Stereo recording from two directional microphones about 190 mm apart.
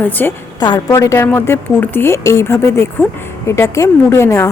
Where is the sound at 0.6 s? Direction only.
20° left (ahead or behind).